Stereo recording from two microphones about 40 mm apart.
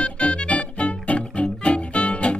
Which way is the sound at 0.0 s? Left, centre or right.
Left.